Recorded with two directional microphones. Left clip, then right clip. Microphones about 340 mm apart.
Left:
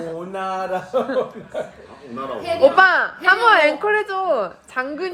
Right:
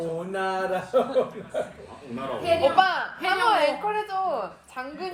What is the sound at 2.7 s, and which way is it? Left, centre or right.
Speech, left.